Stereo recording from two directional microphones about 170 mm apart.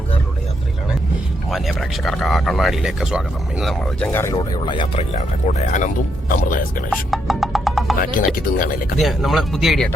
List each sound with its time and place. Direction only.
1.5 s speech: centre (ahead or behind)
4.1 s speech: 15° left (ahead or behind)
4.4 s speech: 25° left (ahead or behind)
5.1 s speech: 45° left (ahead or behind)
6.9 s music: centre (ahead or behind)
8.4 s speech: 55° left (ahead or behind)
9.0 s speech: centre (ahead or behind)